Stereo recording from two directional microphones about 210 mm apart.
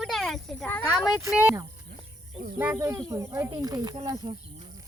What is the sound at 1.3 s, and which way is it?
Speech, 5° right (ahead or behind).